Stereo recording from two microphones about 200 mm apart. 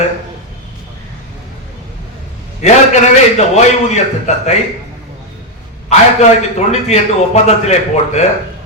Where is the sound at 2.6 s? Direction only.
35° left (ahead or behind).